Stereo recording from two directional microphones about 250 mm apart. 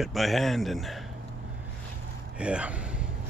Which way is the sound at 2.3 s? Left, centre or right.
Centre.